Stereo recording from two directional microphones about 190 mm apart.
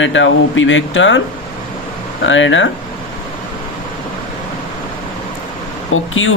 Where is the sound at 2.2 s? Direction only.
90° left.